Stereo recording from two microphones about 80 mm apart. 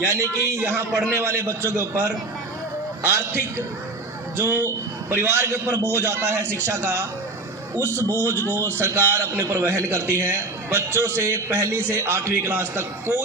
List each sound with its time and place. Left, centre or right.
0.0 s a man's voice: right